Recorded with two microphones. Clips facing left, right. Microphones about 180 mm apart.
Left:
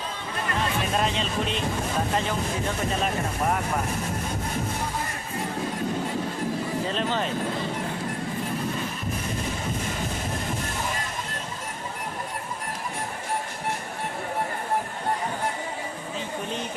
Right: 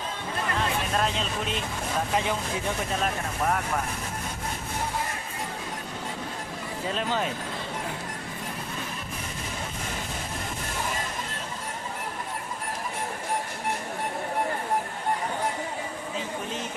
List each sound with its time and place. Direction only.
0.9 s speech: centre (ahead or behind)
3.0 s speech: 5° left (ahead or behind)
6.9 s speech: 5° right (ahead or behind)